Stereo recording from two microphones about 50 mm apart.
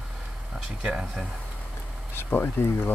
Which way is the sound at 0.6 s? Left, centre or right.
Centre.